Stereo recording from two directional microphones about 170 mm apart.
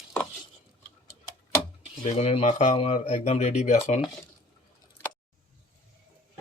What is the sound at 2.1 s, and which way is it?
Speech, 35° left (ahead or behind).